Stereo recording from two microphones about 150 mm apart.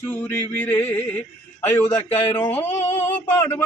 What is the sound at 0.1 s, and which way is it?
A man's voice, 10° left (ahead or behind).